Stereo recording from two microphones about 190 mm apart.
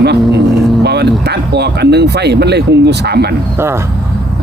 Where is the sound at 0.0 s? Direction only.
60° right (ahead or behind).